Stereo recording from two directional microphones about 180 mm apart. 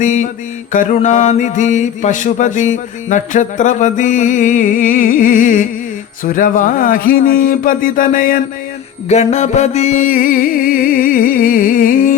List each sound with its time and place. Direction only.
0.0 s mantra: 40° left (ahead or behind)
9.0 s music: 40° left (ahead or behind)